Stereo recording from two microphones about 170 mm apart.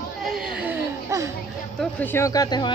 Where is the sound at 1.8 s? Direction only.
10° left (ahead or behind).